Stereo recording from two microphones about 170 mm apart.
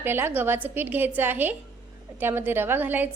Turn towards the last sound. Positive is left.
turn(degrees=-10)  # may be behind; listen again after turning